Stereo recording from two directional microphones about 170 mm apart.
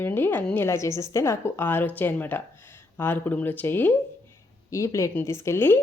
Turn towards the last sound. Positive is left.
turn(degrees=15)  # may be behind; listen again after turning